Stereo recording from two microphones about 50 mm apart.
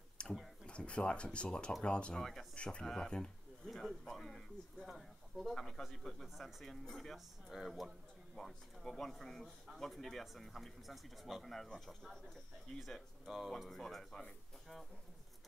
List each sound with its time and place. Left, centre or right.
0.2 s a sound: left
0.7 s speech: left
2.1 s speech: centre
2.5 s speech: left
4.0 s speech: centre
4.8 s speech: centre
5.5 s speech: centre
13.2 s speech: centre